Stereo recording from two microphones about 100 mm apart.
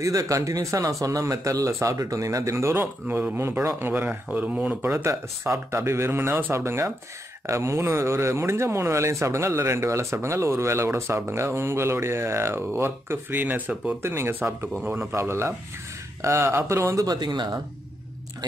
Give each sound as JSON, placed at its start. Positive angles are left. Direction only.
{"t": 0.0, "sound": "speech", "side_deg": -35}